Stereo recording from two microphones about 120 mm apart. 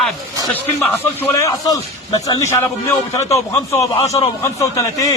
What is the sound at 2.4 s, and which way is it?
A man's voice, 20° left (ahead or behind).